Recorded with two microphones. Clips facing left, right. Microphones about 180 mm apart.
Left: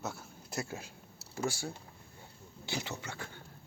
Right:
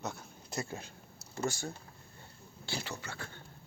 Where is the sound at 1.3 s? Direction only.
10° left (ahead or behind).